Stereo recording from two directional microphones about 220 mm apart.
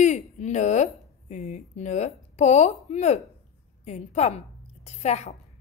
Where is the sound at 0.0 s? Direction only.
35° left (ahead or behind).